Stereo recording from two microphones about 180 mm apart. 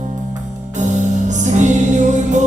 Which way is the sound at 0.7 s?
40° right (ahead or behind).